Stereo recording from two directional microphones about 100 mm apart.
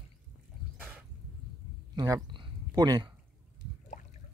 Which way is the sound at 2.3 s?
50° right (ahead or behind).